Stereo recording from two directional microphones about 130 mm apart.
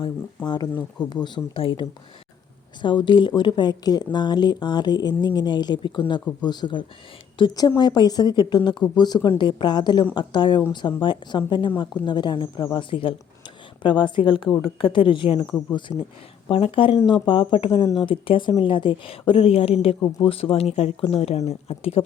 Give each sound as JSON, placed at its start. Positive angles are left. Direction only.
{"t": 0.4, "sound": "a woman's voice", "side_deg": 35}
{"t": 15.9, "sound": "speech", "side_deg": -5}
{"t": 16.5, "sound": "a woman's voice", "side_deg": 45}